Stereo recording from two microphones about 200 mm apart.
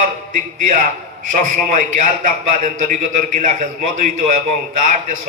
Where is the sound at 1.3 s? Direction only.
40° right (ahead or behind).